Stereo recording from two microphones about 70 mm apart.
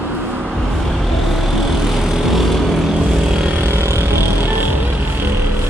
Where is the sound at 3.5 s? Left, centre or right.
Right.